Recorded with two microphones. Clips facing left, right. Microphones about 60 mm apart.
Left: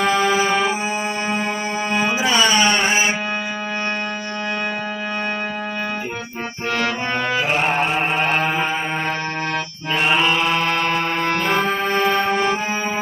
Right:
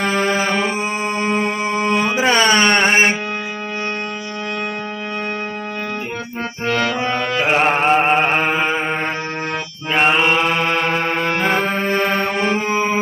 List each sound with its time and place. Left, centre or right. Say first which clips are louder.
2.1 s a sound: right 3 dB; right
7.4 s chant: right 8 dB; right
10.2 s mantra: right 2 dB; right
10.8 s music: right 1 dB; right
11.5 s accordion: right 1 dB; centre
11.9 s music: left 3 dB; centre